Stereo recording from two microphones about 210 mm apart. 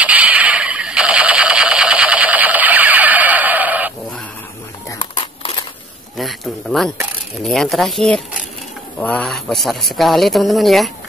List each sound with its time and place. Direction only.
0.0 s radio: 5° right (ahead or behind)
5.2 s crumpling: 25° left (ahead or behind)
6.1 s speech: centre (ahead or behind)